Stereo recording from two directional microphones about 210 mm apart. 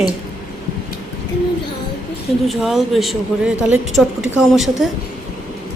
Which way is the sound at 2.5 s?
Centre (ahead or behind).